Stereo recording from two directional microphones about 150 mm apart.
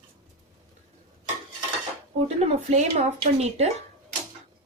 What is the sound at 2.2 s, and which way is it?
Speech, 45° right (ahead or behind).